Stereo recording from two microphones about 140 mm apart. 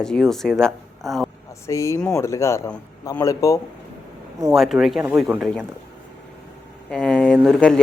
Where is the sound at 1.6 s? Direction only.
20° left (ahead or behind).